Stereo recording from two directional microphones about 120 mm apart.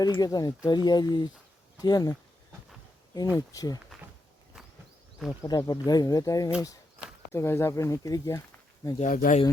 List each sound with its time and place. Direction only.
0.0 s speech: 30° left (ahead or behind)
3.2 s speech: 30° left (ahead or behind)
5.4 s speech: 30° left (ahead or behind)
9.0 s speech: 90° left